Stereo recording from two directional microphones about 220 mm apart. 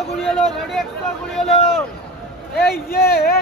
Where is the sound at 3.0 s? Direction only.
45° left (ahead or behind).